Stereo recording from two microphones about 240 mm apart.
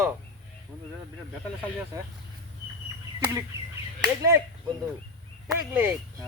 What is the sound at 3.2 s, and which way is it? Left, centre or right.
Speech, centre.